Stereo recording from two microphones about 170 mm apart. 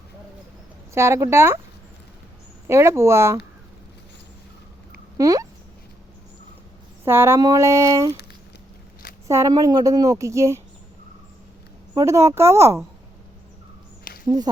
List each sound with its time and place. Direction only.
0.9 s speech: 15° right (ahead or behind)
2.6 s speech: 15° right (ahead or behind)
5.1 s speech: 20° right (ahead or behind)
7.0 s a woman's voice: 15° right (ahead or behind)
9.2 s a woman's voice: 20° right (ahead or behind)
11.9 s speech: 15° right (ahead or behind)
14.1 s a sound: 55° left (ahead or behind)